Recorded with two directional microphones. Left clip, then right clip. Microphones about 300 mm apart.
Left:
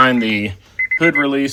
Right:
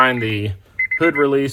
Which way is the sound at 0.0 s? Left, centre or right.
Centre.